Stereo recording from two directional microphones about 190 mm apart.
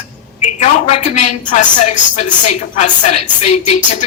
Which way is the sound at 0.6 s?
35° left (ahead or behind).